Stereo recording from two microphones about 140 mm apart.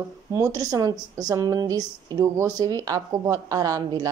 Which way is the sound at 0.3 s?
20° right (ahead or behind).